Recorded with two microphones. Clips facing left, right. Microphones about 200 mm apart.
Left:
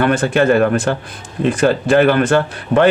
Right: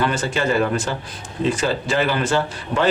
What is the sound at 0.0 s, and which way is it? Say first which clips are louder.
Speech: left 7 dB; 55° left (ahead or behind).